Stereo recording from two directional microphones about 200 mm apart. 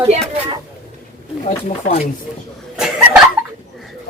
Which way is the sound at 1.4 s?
35° left (ahead or behind).